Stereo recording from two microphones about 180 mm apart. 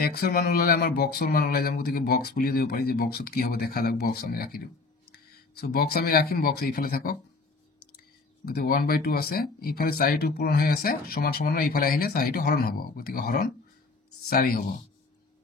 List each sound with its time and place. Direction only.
0.0 s speech: 60° left (ahead or behind)
8.5 s speech: 55° left (ahead or behind)